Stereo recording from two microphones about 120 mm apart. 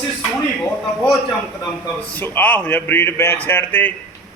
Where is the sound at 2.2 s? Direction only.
15° left (ahead or behind).